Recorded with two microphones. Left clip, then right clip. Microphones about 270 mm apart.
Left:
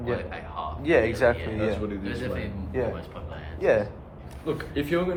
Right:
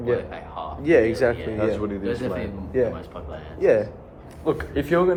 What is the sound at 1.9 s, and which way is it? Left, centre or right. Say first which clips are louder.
Speech: right 5 dB; centre.